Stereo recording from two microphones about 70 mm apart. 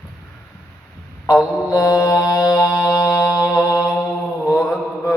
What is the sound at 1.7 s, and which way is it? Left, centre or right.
Mantra, left.